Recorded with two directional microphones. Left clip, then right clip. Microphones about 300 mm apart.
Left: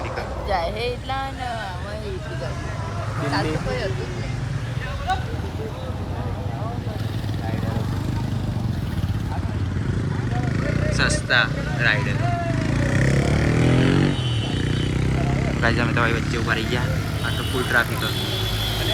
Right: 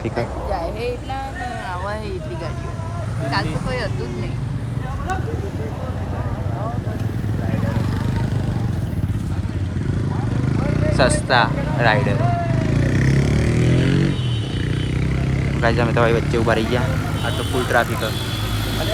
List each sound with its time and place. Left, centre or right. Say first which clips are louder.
10.9 s speech: right 4 dB; centre
12.5 s vehicle: right 1 dB; centre
13.2 s vehicle: even; left
13.8 s vehicle: left 1 dB; left
15.6 s speech: right 4 dB; centre